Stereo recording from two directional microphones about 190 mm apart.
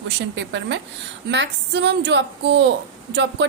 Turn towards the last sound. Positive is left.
turn(degrees=-70)  # may be behind; listen again after turning